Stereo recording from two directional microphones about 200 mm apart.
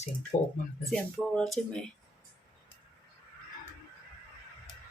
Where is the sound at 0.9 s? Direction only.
5° left (ahead or behind).